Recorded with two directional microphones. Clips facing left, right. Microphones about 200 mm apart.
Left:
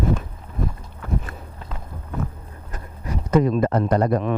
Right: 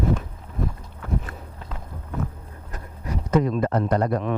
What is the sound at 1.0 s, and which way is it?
Walk, 20° left (ahead or behind).